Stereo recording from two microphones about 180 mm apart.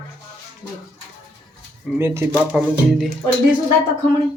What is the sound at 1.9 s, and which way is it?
Speech, 15° right (ahead or behind).